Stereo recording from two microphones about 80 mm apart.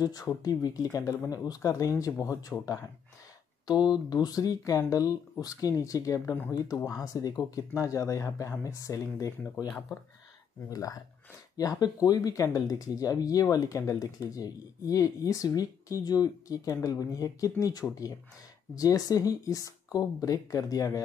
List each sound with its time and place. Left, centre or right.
0.0 s speech: left
4.1 s speech: left
9.7 s speech: left
10.7 s speech: left